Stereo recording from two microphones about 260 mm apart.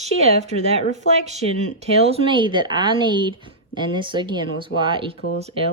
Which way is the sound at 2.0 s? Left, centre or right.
Right.